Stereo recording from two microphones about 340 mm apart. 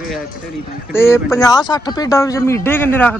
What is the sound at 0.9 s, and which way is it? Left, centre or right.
A man's voice, centre.